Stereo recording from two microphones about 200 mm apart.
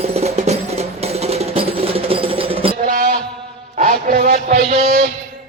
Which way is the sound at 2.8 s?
40° right (ahead or behind).